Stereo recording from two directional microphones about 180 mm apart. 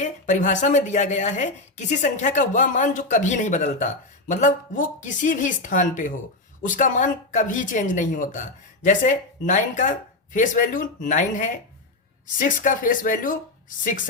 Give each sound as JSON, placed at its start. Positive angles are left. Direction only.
{"t": 0.0, "sound": "a woman's voice", "side_deg": 45}